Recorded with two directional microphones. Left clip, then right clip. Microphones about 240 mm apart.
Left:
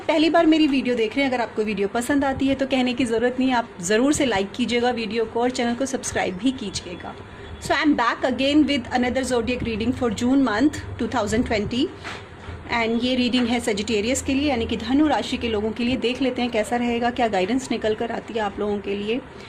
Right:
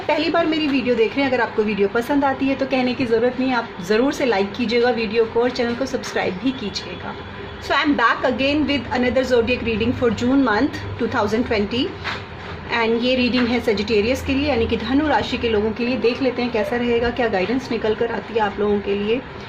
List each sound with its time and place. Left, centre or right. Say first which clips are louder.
0.1 s a woman's voice: left 1 dB; left
7.7 s a woman's voice: right 3 dB; left
12.7 s a woman's voice: right 4 dB; left